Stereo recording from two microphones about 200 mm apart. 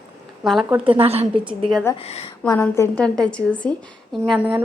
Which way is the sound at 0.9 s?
30° right (ahead or behind).